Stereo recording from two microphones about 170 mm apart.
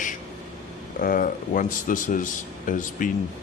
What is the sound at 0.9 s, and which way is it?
Speech, 55° left (ahead or behind).